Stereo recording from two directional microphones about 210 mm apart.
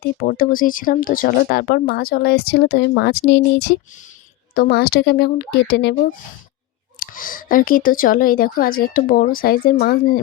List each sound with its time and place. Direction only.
0.2 s speech: 45° left (ahead or behind)
7.1 s speech: 40° left (ahead or behind)